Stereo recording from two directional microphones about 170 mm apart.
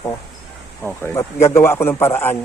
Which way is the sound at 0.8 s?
15° left (ahead or behind).